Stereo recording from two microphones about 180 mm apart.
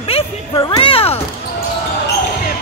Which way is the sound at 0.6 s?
30° left (ahead or behind).